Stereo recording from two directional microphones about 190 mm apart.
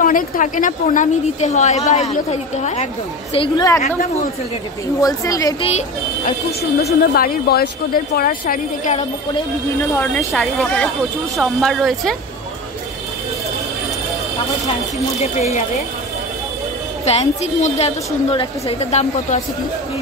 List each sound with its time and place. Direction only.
0.0 s a woman's voice: 45° left (ahead or behind)
3.3 s a woman's voice: 20° left (ahead or behind)
5.0 s a woman's voice: 15° left (ahead or behind)
5.6 s a woman's voice: 35° left (ahead or behind)
7.2 s a woman's voice: 55° left (ahead or behind)
9.9 s speech: 5° left (ahead or behind)
15.3 s a woman's voice: 40° left (ahead or behind)
17.0 s a woman's voice: 35° left (ahead or behind)